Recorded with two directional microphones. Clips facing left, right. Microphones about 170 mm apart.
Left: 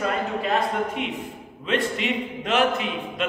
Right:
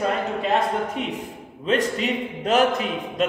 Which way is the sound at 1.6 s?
40° right (ahead or behind).